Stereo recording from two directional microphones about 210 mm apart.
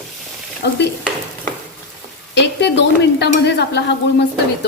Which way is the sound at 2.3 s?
55° left (ahead or behind).